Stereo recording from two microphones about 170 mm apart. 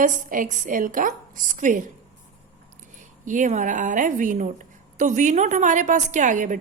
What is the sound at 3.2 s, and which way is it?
A woman's voice, 45° right (ahead or behind).